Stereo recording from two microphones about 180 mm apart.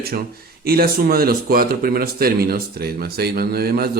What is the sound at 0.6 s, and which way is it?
Speech, 55° right (ahead or behind).